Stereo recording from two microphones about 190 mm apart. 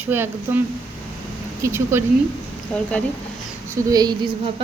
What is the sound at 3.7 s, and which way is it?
Speech, 20° right (ahead or behind).